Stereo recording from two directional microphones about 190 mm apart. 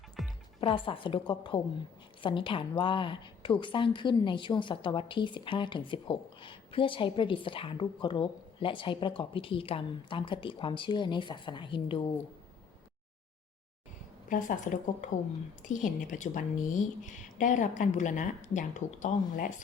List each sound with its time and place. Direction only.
0.6 s a woman's voice: 25° left (ahead or behind)
14.3 s a woman's voice: 45° left (ahead or behind)